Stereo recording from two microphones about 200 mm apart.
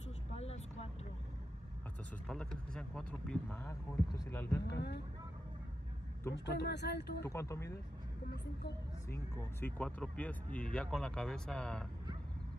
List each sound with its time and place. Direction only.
0.3 s vehicle: 30° left (ahead or behind)
2.2 s speech: 5° left (ahead or behind)
4.6 s speech: 55° left (ahead or behind)
6.3 s speech: 60° left (ahead or behind)
7.2 s speech: 15° left (ahead or behind)
9.1 s speech: 10° left (ahead or behind)